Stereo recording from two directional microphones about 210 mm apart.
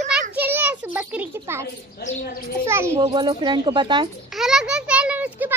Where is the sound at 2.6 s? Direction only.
10° right (ahead or behind).